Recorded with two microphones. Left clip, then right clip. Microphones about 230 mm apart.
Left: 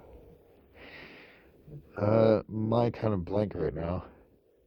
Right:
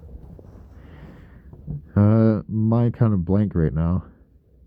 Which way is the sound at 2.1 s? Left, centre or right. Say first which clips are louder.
Even; left.